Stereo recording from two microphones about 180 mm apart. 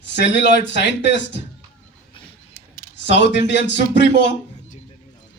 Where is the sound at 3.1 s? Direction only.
75° left (ahead or behind).